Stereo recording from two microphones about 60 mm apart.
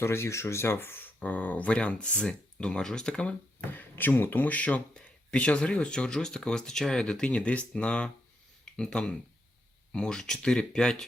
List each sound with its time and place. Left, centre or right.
0.0 s speech: left; by 3.3 s centre
3.8 s speech: left; by 11.0 s centre